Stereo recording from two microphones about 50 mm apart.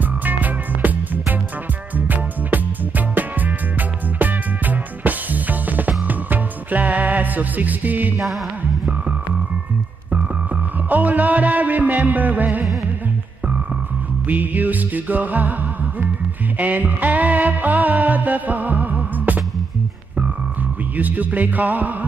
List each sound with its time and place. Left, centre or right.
0.2 s music: right
4.2 s music: right
10.9 s music: right
14.2 s music: right
16.5 s music: right
20.9 s music: right